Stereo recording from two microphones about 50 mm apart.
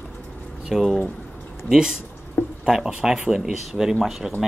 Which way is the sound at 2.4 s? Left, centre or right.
Left.